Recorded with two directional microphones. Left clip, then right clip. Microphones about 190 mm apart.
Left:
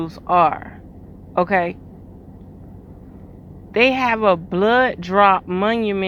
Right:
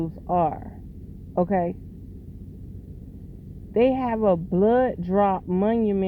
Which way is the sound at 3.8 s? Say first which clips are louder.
Left 5 dB; 10° right (ahead or behind).